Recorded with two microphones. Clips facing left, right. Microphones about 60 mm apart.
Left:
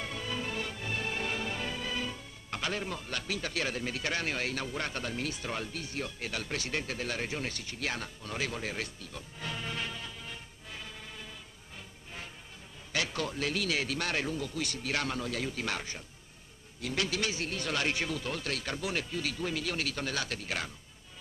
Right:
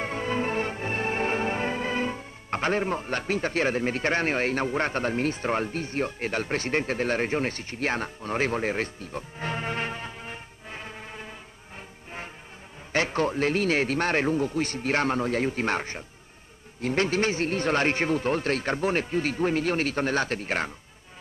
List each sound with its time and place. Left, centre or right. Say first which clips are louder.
0.0 s music: right 9 dB; right
12.9 s speech: right 9 dB; right